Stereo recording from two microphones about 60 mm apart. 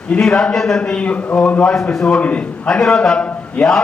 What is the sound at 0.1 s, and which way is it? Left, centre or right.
A man's voice, centre.